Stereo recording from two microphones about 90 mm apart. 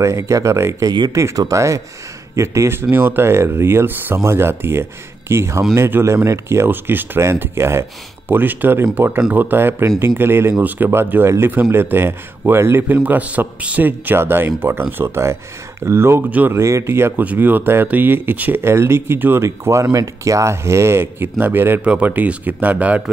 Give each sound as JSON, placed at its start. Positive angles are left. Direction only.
{"t": 0.0, "sound": "speech", "side_deg": -35}
{"t": 0.8, "sound": "speech", "side_deg": -50}
{"t": 1.1, "sound": "a man's voice", "side_deg": -30}
{"t": 16.3, "sound": "a man's voice", "side_deg": -15}
{"t": 16.5, "sound": "a man's voice", "side_deg": -35}
{"t": 19.4, "sound": "a man's voice", "side_deg": -35}